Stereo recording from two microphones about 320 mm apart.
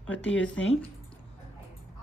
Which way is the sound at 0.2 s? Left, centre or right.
Left.